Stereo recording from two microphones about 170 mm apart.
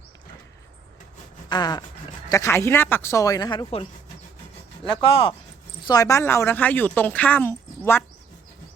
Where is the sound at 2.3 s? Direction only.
15° left (ahead or behind).